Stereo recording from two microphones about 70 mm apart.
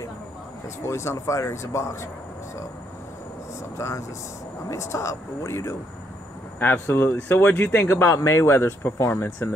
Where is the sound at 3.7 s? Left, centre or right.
Left.